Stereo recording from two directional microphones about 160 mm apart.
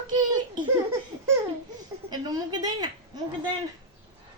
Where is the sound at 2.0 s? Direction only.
25° right (ahead or behind).